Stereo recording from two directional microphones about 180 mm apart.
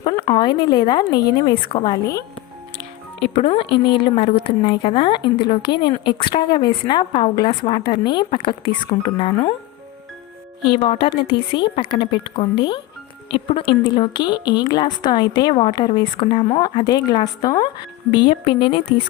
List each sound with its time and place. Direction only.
0.0 s a woman's voice: 25° left (ahead or behind)
2.7 s a woman's voice: 30° left (ahead or behind)
10.7 s a woman's voice: 30° left (ahead or behind)